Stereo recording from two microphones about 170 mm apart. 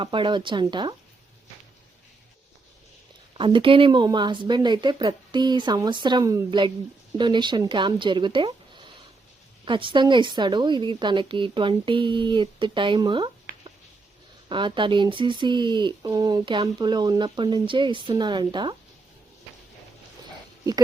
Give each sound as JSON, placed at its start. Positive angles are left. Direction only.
{"t": 0.0, "sound": "speech", "side_deg": -30}
{"t": 3.3, "sound": "speech", "side_deg": -30}
{"t": 14.5, "sound": "speech", "side_deg": -30}